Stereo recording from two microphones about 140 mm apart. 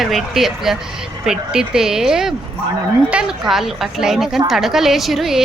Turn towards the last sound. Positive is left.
turn(degrees=0)  # may be behind; listen again after turning